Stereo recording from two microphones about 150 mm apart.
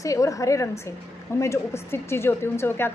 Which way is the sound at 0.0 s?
20° left (ahead or behind).